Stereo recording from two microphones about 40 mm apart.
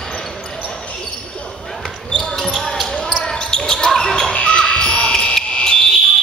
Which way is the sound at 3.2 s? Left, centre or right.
Centre.